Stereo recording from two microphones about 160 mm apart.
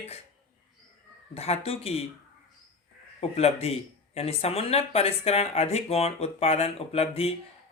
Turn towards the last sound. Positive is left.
turn(degrees=40)  # may be behind; listen again after turning